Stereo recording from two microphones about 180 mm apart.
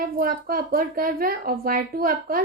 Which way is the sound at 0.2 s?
55° right (ahead or behind).